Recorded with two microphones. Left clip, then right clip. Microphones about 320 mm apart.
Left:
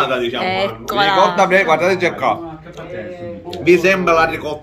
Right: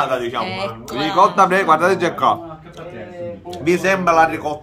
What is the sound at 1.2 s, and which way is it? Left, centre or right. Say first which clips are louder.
A man's voice: right 4 dB; right.